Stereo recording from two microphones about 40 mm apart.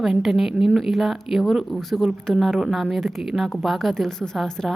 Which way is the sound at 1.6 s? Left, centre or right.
Centre.